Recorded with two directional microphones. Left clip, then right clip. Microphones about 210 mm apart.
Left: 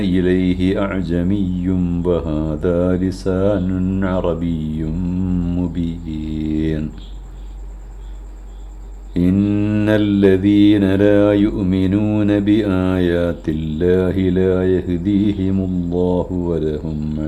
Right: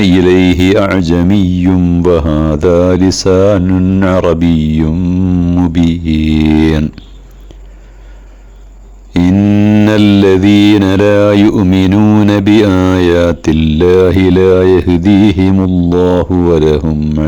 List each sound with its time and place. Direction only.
0.0 s speech: 40° right (ahead or behind)
1.8 s music: 25° right (ahead or behind)
2.0 s speech: 40° right (ahead or behind)
4.9 s music: 25° right (ahead or behind)
5.7 s speech: 35° right (ahead or behind)
9.4 s mantra: 25° right (ahead or behind)
9.8 s speech: 35° right (ahead or behind)